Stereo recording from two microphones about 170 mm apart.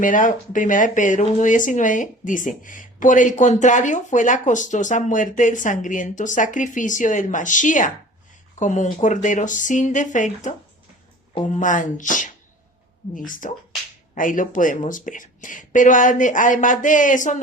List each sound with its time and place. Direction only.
0.0 s speech: 50° left (ahead or behind)